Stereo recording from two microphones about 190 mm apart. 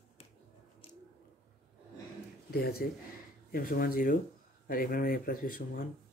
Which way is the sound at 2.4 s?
55° left (ahead or behind).